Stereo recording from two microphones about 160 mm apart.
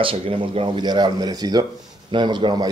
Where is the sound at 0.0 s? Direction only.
35° right (ahead or behind).